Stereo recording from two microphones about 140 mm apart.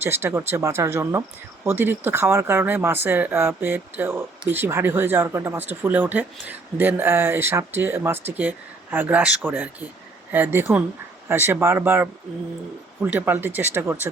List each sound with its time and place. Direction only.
0.0 s speech: 15° right (ahead or behind)
13.1 s speech: 15° right (ahead or behind)